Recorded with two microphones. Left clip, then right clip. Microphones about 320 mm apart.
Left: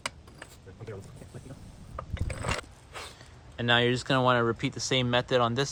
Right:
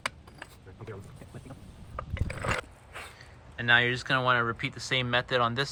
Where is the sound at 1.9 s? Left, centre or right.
Centre.